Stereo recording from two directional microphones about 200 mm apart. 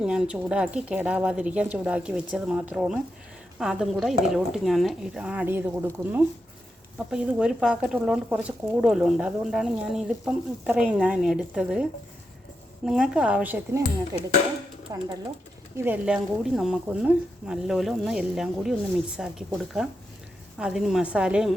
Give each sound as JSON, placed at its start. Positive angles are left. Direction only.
{"t": 0.0, "sound": "speech", "side_deg": -5}